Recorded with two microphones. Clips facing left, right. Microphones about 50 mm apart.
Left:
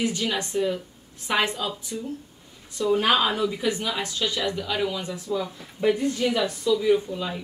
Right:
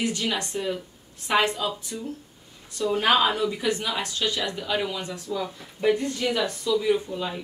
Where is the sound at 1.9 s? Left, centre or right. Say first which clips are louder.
Left 2 dB; centre.